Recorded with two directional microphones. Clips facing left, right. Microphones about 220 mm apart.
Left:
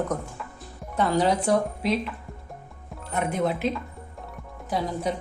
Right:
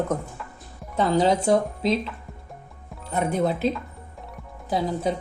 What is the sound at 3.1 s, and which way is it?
A woman's voice, 35° right (ahead or behind).